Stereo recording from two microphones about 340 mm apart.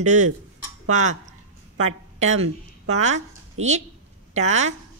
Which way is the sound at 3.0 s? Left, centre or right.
Right.